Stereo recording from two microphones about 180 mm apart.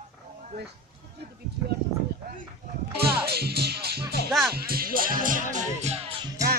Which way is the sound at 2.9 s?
60° right (ahead or behind).